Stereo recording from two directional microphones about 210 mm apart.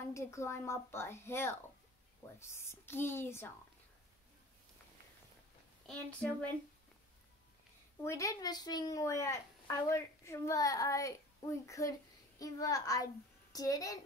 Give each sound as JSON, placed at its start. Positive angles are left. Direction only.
{"t": 0.1, "sound": "a woman's voice", "side_deg": 15}
{"t": 5.9, "sound": "a woman's voice", "side_deg": 5}
{"t": 8.0, "sound": "a woman's voice", "side_deg": 15}